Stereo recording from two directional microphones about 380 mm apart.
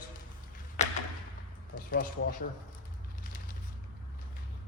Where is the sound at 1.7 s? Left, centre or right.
Left.